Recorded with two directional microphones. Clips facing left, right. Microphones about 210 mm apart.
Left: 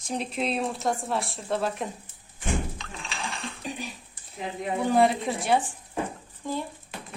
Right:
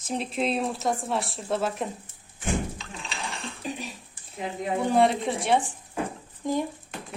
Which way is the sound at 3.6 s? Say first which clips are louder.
Right 2 dB; centre (ahead or behind).